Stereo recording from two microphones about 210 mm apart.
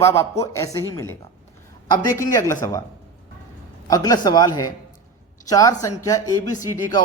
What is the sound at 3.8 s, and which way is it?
Speech, 15° left (ahead or behind).